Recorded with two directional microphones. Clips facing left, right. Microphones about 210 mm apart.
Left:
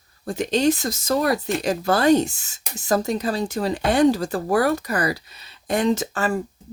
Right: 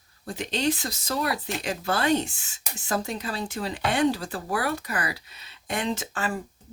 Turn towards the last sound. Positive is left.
turn(degrees=40)  # may be behind; listen again after turning